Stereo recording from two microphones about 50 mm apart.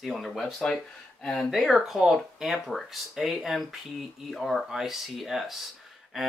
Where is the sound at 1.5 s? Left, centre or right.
Centre.